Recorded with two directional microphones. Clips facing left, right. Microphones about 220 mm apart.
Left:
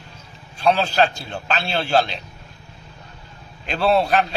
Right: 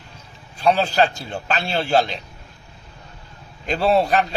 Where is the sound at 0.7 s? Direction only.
15° right (ahead or behind).